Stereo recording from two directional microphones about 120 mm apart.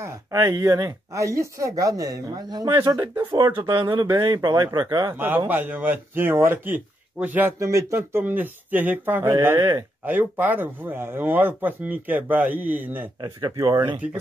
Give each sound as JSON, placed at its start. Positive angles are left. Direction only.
{"t": 0.0, "sound": "speech", "side_deg": -30}
{"t": 5.1, "sound": "speech", "side_deg": -15}
{"t": 9.6, "sound": "speech", "side_deg": -35}
{"t": 10.0, "sound": "speech", "side_deg": -15}
{"t": 13.2, "sound": "speech", "side_deg": -35}
{"t": 13.7, "sound": "speech", "side_deg": -15}